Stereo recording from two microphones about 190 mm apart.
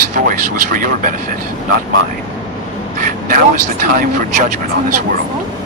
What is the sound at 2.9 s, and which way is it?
Vehicle, 45° right (ahead or behind).